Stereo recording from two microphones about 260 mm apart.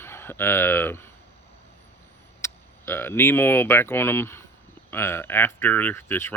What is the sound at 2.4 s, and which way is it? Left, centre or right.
Speech, centre.